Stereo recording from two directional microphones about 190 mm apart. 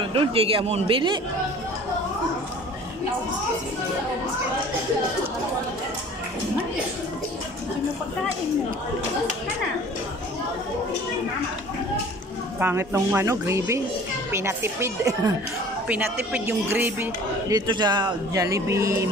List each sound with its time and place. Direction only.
0.0 s speech: 30° right (ahead or behind)
12.5 s speech: 10° right (ahead or behind)